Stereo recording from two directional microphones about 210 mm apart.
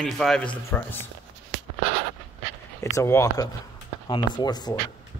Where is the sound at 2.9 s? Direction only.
15° left (ahead or behind).